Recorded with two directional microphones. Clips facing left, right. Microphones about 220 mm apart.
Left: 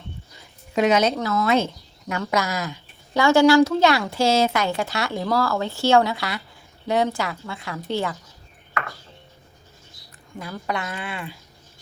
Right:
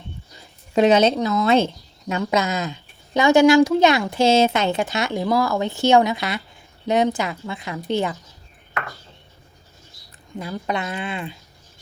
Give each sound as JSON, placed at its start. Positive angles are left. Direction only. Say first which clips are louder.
{"t": 0.3, "sound": "a sound", "louder": "right 4 dB", "side_deg": -30}
{"t": 1.1, "sound": "speech", "louder": "right 3 dB", "side_deg": -20}
{"t": 10.3, "sound": "speech", "louder": "right 3 dB", "side_deg": -20}